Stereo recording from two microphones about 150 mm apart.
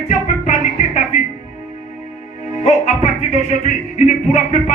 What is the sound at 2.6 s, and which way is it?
Music, 45° left (ahead or behind).